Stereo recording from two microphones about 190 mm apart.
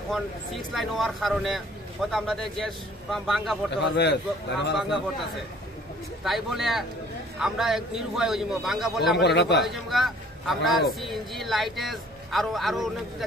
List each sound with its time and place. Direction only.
0.1 s speech: centre (ahead or behind)
3.7 s a man's voice: 65° left (ahead or behind)
4.7 s speech: centre (ahead or behind)
6.2 s speech: centre (ahead or behind)
9.1 s a man's voice: 65° left (ahead or behind)
9.8 s speech: centre (ahead or behind)